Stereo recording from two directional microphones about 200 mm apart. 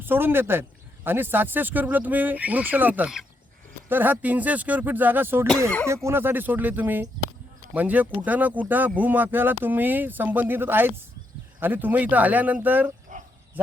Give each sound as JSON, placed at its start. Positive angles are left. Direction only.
{"t": 0.0, "sound": "speech", "side_deg": -10}
{"t": 13.1, "sound": "bow-wow", "side_deg": -40}